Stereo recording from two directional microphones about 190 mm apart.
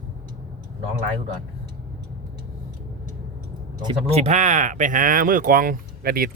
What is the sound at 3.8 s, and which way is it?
Speech, 25° right (ahead or behind).